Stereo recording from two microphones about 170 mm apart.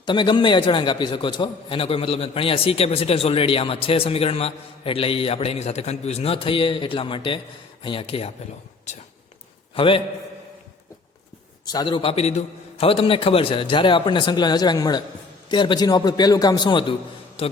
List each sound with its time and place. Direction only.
0.0 s a man's voice: 25° left (ahead or behind)
9.7 s a man's voice: 30° left (ahead or behind)
11.6 s a man's voice: 20° left (ahead or behind)